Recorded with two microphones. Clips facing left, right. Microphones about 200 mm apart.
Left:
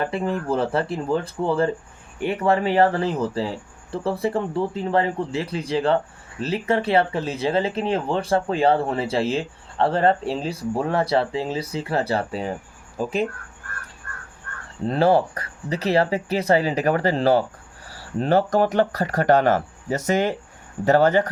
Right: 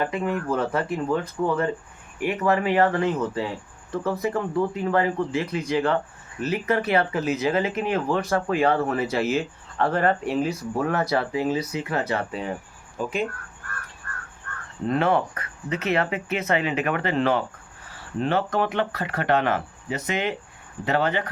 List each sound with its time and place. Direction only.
0.0 s speech: 30° left (ahead or behind)
14.8 s speech: 30° left (ahead or behind)